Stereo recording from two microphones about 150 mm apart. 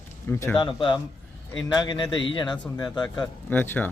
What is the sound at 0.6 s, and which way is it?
A man's voice, 30° left (ahead or behind).